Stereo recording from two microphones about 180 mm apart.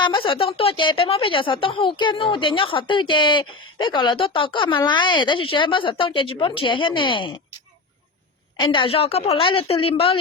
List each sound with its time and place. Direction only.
0.0 s speech: 25° left (ahead or behind)
8.5 s a woman's voice: 30° left (ahead or behind)